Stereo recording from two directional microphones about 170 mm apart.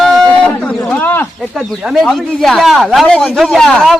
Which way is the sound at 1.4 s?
Centre (ahead or behind).